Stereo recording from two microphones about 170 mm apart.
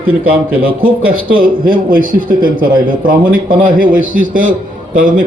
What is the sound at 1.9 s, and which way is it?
A man's voice, 55° right (ahead or behind).